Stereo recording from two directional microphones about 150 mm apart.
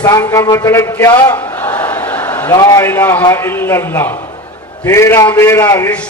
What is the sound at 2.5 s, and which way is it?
Speech, 25° left (ahead or behind).